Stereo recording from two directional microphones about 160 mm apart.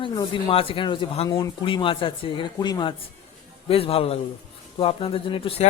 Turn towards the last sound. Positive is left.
turn(degrees=35)  # may be behind; listen again after turning